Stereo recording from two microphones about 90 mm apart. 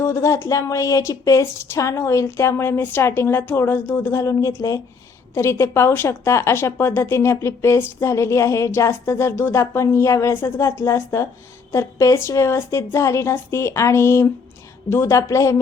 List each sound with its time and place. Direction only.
0.0 s a woman's voice: 35° left (ahead or behind)
4.1 s speech: 35° left (ahead or behind)